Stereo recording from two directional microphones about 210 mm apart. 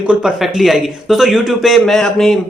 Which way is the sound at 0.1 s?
5° right (ahead or behind).